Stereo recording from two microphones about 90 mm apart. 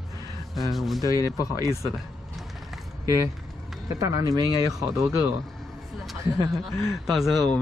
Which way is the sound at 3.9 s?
35° right (ahead or behind).